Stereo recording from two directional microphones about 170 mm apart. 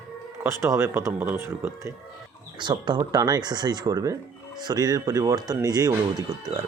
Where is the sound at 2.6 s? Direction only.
25° right (ahead or behind).